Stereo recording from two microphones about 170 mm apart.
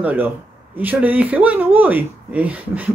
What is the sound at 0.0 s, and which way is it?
Speech, 10° right (ahead or behind).